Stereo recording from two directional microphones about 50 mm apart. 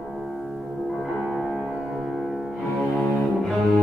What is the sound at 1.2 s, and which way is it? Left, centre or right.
Music, centre.